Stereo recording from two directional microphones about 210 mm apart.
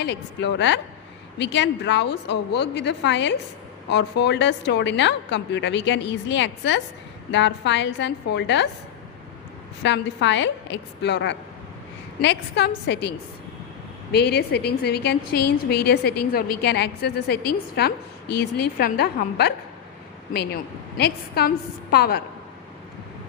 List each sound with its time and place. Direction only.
0.0 s a woman's voice: 55° left (ahead or behind)
9.8 s a woman's voice: 55° left (ahead or behind)